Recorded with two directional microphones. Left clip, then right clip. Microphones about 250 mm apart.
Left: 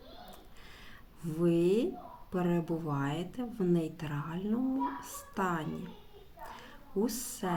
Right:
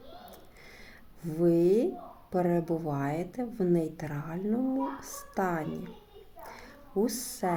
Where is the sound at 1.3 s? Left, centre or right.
Centre.